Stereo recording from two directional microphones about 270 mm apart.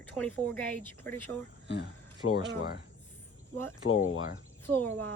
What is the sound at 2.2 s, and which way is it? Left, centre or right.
Speech, left.